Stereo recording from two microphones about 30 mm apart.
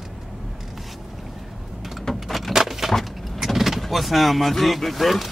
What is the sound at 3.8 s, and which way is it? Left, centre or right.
Speech, centre.